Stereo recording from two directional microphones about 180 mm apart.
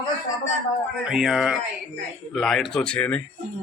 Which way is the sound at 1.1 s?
5° right (ahead or behind).